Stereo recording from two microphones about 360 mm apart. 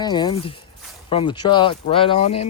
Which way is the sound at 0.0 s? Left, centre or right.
Centre.